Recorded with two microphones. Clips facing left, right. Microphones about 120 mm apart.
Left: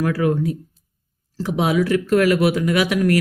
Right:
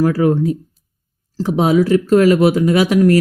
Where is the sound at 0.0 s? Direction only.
30° right (ahead or behind).